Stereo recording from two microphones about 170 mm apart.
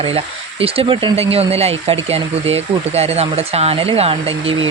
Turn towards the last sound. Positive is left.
turn(degrees=-35)  # may be behind; listen again after turning